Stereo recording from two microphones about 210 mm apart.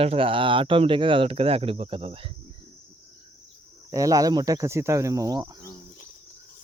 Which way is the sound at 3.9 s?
15° right (ahead or behind).